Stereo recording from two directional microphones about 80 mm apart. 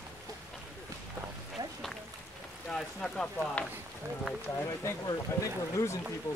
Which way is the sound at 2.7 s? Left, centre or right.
Centre.